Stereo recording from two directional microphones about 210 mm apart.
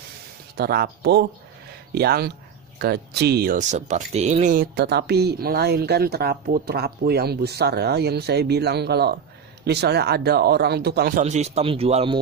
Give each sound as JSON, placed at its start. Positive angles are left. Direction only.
{"t": 0.5, "sound": "speech", "side_deg": -50}
{"t": 11.2, "sound": "speech", "side_deg": -35}